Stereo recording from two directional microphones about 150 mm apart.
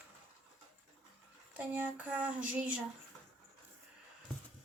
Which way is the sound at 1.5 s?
10° right (ahead or behind).